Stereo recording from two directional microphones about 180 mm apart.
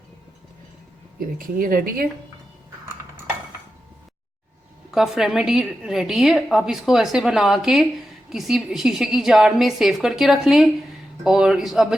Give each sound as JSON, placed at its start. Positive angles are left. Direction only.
{"t": 1.2, "sound": "speech", "side_deg": -55}
{"t": 4.9, "sound": "a woman's voice", "side_deg": 0}